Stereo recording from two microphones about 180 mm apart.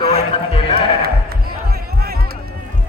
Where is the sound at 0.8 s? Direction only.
60° right (ahead or behind).